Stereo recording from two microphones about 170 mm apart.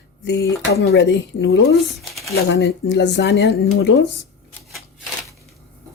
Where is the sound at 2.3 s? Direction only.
80° left.